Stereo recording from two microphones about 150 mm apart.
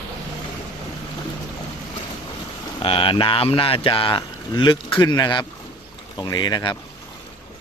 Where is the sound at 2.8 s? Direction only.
35° left (ahead or behind).